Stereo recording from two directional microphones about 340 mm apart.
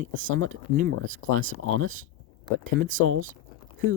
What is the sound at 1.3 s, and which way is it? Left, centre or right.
Speech, right.